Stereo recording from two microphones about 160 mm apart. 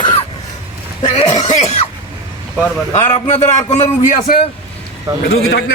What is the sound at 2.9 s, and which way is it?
A man's voice, 45° left (ahead or behind).